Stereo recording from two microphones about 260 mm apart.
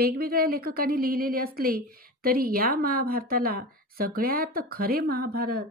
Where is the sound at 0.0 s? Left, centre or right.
Right.